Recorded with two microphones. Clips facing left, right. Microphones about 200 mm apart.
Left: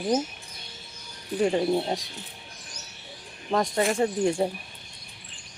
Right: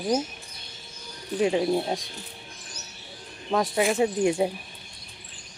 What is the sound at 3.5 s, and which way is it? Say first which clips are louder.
Speech: right 1 dB; 5° right (ahead or behind).